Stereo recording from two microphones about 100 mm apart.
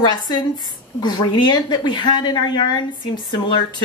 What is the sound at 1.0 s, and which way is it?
A woman's voice, 50° left (ahead or behind).